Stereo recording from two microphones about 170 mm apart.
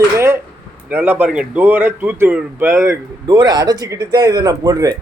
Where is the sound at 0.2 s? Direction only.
15° right (ahead or behind).